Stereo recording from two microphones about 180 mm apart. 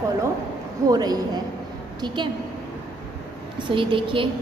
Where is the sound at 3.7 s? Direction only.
30° right (ahead or behind).